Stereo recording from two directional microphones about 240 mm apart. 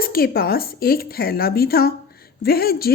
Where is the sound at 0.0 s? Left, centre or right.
Left.